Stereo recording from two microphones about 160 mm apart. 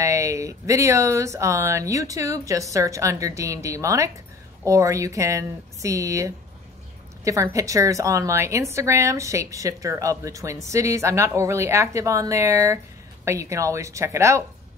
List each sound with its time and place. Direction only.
0.0 s a woman's voice: 20° right (ahead or behind)
7.5 s a woman's voice: 20° right (ahead or behind)